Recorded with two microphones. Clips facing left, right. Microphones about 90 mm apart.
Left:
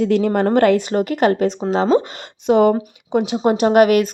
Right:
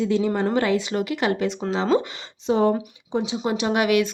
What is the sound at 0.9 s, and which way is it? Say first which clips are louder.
Speech: left 7 dB; 45° left (ahead or behind).